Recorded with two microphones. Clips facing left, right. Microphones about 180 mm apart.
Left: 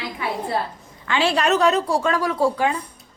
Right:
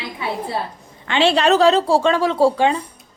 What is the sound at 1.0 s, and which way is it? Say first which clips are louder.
A woman's voice: right 4 dB; 25° right (ahead or behind).